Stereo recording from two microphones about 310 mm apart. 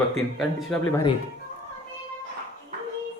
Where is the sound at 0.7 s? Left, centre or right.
Centre.